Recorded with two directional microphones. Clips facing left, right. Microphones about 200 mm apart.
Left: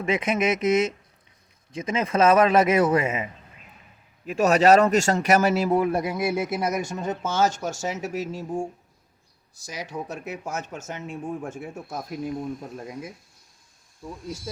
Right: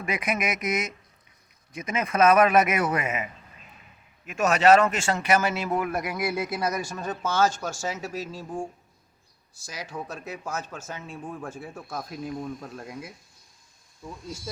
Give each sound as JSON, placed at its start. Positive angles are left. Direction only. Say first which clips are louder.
{"t": 0.0, "sound": "speech", "louder": "left 5 dB", "side_deg": 25}
{"t": 4.3, "sound": "speech", "louder": "left 2 dB", "side_deg": 35}
{"t": 9.9, "sound": "speech", "louder": "left 3 dB", "side_deg": 15}